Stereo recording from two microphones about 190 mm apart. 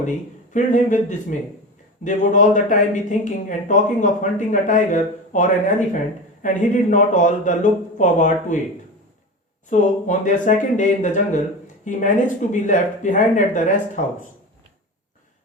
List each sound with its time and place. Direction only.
0.5 s speech: 40° left (ahead or behind)
9.6 s speech: 40° left (ahead or behind)